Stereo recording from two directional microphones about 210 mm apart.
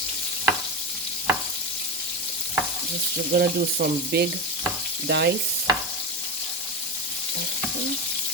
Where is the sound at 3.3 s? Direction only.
50° right (ahead or behind).